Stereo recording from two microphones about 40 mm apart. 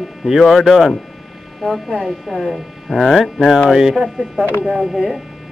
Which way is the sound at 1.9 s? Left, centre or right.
Centre.